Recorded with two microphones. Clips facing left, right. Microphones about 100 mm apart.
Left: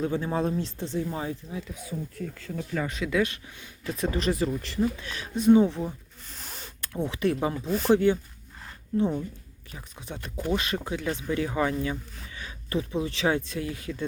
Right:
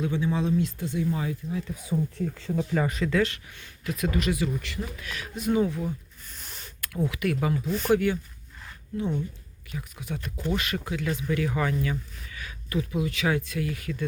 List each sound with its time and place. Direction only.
0.0 s speech: 40° left (ahead or behind)
0.6 s speech: 30° left (ahead or behind)
1.9 s speech: 25° right (ahead or behind)
2.7 s speech: 5° right (ahead or behind)
3.1 s speech: 15° left (ahead or behind)
3.8 s speech: 30° left (ahead or behind)
9.0 s speech: 35° left (ahead or behind)